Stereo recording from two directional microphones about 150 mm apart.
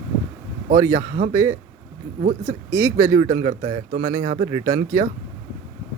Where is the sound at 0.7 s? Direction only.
20° right (ahead or behind).